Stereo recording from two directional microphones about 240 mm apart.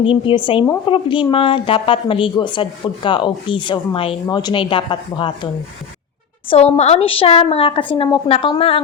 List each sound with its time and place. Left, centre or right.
0.0 s speech: left
6.7 s speech: left